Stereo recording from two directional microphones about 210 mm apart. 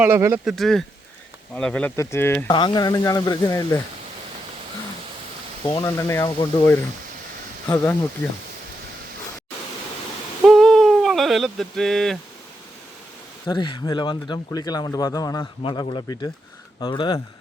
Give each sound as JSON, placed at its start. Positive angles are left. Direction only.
{"t": 0.0, "sound": "speech", "side_deg": -10}
{"t": 0.4, "sound": "speech", "side_deg": 0}
{"t": 5.6, "sound": "speech", "side_deg": 15}
{"t": 10.4, "sound": "owl", "side_deg": 0}
{"t": 13.5, "sound": "speech", "side_deg": 20}